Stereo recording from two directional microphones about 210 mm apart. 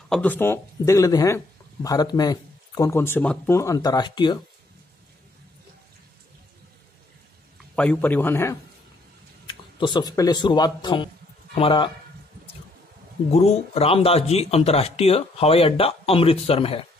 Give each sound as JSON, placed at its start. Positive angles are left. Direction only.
{"t": 0.1, "sound": "speech", "side_deg": 10}
{"t": 7.7, "sound": "speech", "side_deg": 5}
{"t": 9.5, "sound": "speech", "side_deg": 20}
{"t": 13.3, "sound": "speech", "side_deg": 30}